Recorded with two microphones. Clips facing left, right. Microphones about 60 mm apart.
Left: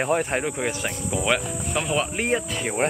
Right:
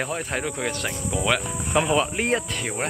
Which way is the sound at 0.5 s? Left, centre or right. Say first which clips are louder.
Left 1 dB; centre.